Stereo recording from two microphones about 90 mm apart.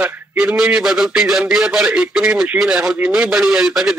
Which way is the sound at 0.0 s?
20° right (ahead or behind).